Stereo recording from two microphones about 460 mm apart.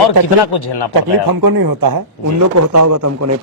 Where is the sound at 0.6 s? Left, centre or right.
Left.